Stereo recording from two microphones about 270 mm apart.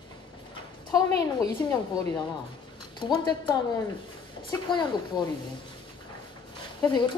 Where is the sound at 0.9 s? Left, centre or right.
Centre.